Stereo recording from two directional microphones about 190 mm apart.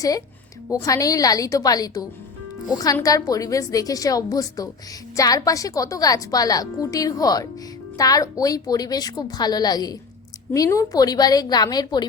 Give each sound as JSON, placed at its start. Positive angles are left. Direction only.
{"t": 0.7, "sound": "a woman's voice", "side_deg": 15}